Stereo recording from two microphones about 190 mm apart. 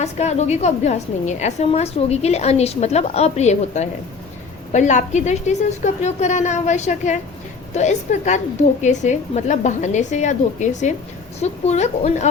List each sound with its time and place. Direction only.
0.0 s a woman's voice: 35° left (ahead or behind)